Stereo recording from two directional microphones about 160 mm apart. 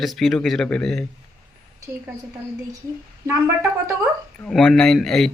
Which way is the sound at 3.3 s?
15° right (ahead or behind).